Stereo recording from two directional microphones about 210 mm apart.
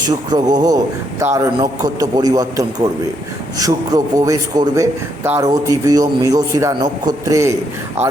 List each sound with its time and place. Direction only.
0.0 s a man's voice: 20° right (ahead or behind)